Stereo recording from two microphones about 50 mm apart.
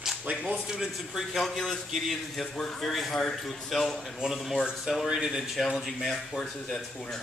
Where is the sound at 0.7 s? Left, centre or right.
Centre.